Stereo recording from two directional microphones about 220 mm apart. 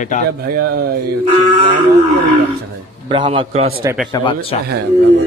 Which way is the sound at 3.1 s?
25° right (ahead or behind).